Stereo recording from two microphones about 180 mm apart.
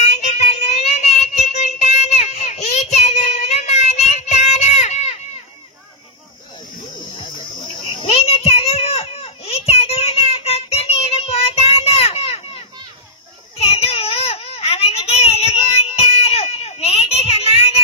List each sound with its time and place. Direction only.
0.2 s child singing: 40° left (ahead or behind)
7.9 s a sound: 35° left (ahead or behind)
13.6 s baby cry: 35° left (ahead or behind)